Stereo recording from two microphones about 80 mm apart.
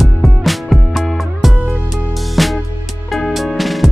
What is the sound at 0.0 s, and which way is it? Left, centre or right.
Music, centre.